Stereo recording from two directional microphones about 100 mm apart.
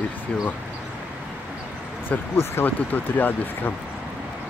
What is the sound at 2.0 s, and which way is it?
Speech, 20° left (ahead or behind).